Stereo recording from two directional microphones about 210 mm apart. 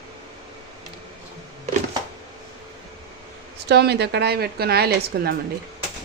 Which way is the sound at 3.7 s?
50° right (ahead or behind).